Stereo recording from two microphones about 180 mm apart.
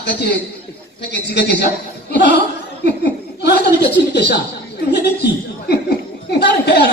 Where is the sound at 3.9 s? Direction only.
70° left (ahead or behind).